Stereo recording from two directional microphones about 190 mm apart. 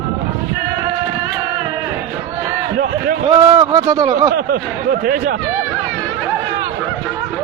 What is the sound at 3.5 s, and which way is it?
Speech, 20° right (ahead or behind).